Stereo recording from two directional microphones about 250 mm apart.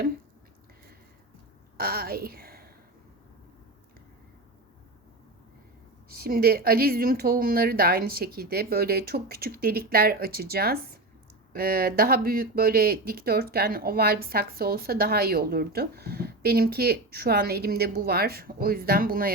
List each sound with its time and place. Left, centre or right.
1.8 s a woman's voice: right
6.1 s speech: right